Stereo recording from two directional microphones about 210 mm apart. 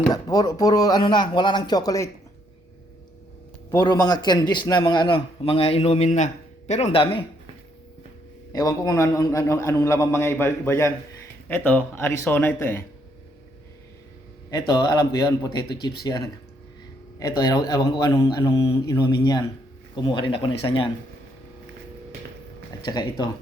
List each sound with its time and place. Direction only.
0.1 s a man's voice: 15° left (ahead or behind)
3.7 s a man's voice: 15° left (ahead or behind)
8.5 s a man's voice: 15° left (ahead or behind)
14.7 s a man's voice: 20° left (ahead or behind)
22.8 s a man's voice: 20° left (ahead or behind)